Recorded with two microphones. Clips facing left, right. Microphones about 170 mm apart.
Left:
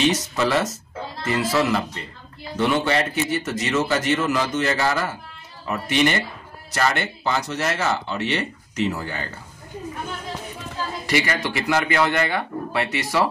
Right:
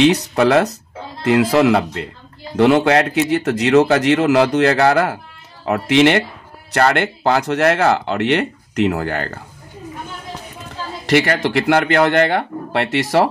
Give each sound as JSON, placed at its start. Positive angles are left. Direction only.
{"t": 0.0, "sound": "speech", "side_deg": -70}
{"t": 5.7, "sound": "speech", "side_deg": -90}
{"t": 6.7, "sound": "speech", "side_deg": -70}
{"t": 11.1, "sound": "speech", "side_deg": -60}